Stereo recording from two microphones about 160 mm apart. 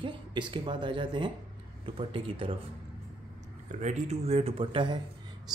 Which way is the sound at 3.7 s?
50° right (ahead or behind).